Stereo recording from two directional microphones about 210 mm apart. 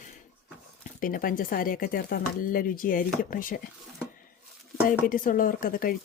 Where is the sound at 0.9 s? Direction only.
40° left (ahead or behind).